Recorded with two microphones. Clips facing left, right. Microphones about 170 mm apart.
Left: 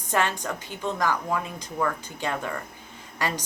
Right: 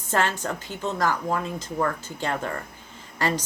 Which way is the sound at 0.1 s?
15° left (ahead or behind).